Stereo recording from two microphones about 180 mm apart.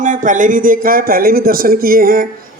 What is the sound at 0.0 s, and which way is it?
Speech, 45° right (ahead or behind).